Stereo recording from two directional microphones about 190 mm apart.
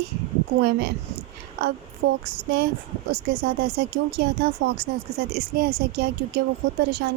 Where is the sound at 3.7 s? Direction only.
60° right (ahead or behind).